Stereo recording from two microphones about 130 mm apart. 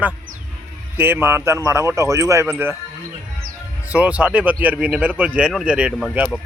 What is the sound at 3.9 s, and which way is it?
Speech, 10° right (ahead or behind).